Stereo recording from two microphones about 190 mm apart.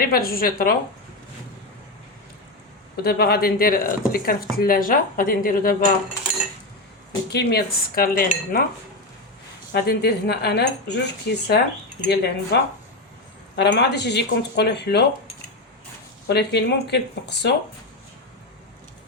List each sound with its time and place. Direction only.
0.0 s speech: 50° left (ahead or behind)
2.9 s speech: 55° left (ahead or behind)
7.3 s speech: 55° left (ahead or behind)
9.7 s speech: 60° left (ahead or behind)
13.6 s speech: 60° left (ahead or behind)
16.2 s speech: 60° left (ahead or behind)